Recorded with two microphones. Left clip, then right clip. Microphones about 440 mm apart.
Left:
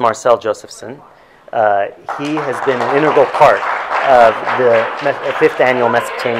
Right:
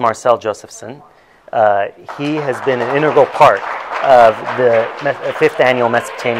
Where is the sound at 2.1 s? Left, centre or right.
Right.